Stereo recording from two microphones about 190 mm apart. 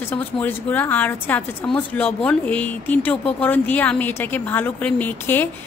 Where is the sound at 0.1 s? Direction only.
10° left (ahead or behind).